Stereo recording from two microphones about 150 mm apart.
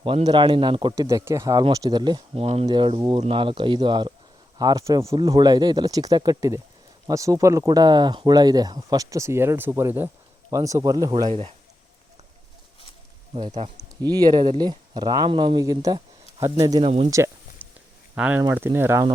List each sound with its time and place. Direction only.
0.0 s speech: 35° right (ahead or behind)
1.0 s speech: 20° right (ahead or behind)
2.4 s speech: 40° right (ahead or behind)
2.6 s speech: 30° right (ahead or behind)
11.3 s speech: 45° right (ahead or behind)
13.3 s speech: 35° right (ahead or behind)
14.0 s speech: 25° right (ahead or behind)
16.8 s speech: 40° right (ahead or behind)
17.1 s a sound: 20° right (ahead or behind)
18.1 s speech: 10° right (ahead or behind)